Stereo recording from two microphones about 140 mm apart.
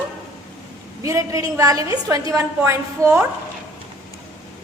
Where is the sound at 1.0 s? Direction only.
25° right (ahead or behind).